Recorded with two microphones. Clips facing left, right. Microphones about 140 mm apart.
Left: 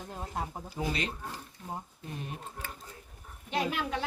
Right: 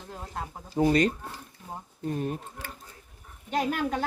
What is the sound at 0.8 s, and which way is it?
Speech, 45° right (ahead or behind).